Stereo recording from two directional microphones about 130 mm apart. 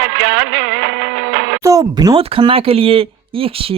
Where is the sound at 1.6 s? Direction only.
25° right (ahead or behind).